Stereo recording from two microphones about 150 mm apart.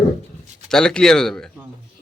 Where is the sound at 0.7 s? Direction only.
5° left (ahead or behind).